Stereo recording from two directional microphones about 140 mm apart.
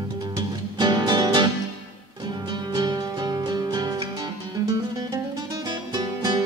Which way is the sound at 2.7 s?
30° right (ahead or behind).